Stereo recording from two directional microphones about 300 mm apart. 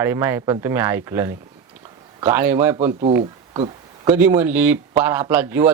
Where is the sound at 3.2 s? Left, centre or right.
Right.